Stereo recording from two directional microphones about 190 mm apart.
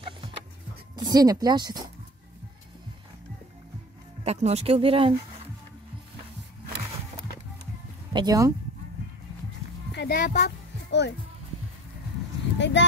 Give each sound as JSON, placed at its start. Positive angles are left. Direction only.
{"t": 0.9, "sound": "speech", "side_deg": -20}
{"t": 4.2, "sound": "speech", "side_deg": -35}
{"t": 8.1, "sound": "speech", "side_deg": -20}
{"t": 9.9, "sound": "speech", "side_deg": 50}
{"t": 10.9, "sound": "a child's voice", "side_deg": 65}
{"t": 12.5, "sound": "a sound", "side_deg": 70}